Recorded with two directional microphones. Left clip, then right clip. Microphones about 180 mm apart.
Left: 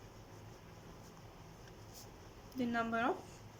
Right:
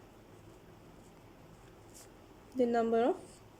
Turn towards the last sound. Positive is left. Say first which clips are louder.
# right 7 dB
turn(degrees=-30)  # may be behind; listen again after turning